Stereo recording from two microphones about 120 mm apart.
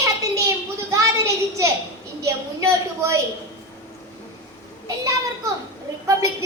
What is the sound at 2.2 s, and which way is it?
Speech, 25° right (ahead or behind).